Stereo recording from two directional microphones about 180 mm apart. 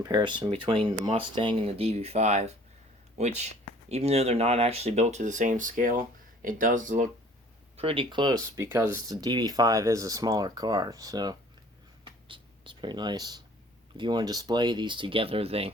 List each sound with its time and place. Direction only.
0.0 s speech: 25° right (ahead or behind); by 7.1 s 45° right (ahead or behind)
7.8 s speech: 30° right (ahead or behind)
12.0 s a sound: 25° right (ahead or behind)
13.9 s speech: 25° right (ahead or behind)